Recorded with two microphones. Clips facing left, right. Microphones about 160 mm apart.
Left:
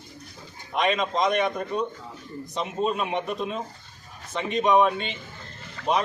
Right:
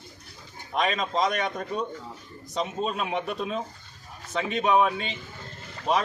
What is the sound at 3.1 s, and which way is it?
Speech, centre (ahead or behind).